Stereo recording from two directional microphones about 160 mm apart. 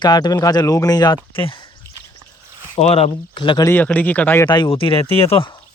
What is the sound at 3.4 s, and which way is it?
Speech, 30° left (ahead or behind).